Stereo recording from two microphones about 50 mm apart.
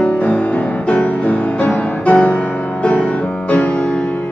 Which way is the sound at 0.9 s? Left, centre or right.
Left.